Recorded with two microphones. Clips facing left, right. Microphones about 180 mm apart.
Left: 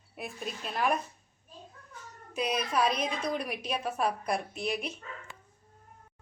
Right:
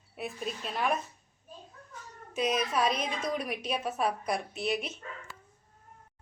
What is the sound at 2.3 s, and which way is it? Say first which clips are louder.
A woman's voice: right 1 dB; centre (ahead or behind).